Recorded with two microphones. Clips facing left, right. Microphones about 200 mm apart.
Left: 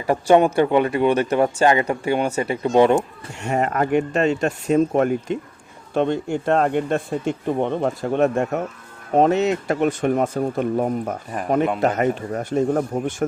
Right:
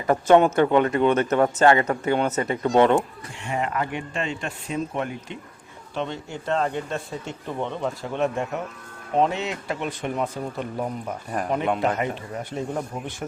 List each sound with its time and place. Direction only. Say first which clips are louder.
0.1 s a man's voice: left 1 dB; 15° left (ahead or behind)
3.3 s speech: left 5 dB; 45° left (ahead or behind)